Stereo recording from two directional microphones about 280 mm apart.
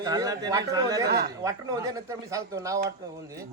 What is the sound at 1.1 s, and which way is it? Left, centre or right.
Speech, right.